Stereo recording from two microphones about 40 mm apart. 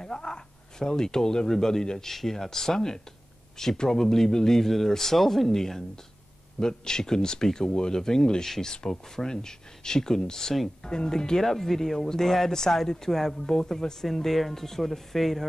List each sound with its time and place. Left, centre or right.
0.0 s speech: centre